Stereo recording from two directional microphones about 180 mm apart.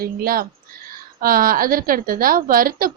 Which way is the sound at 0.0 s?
55° right (ahead or behind).